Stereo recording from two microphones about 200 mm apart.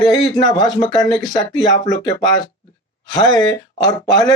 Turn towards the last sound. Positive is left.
turn(degrees=20)  # may be behind; listen again after turning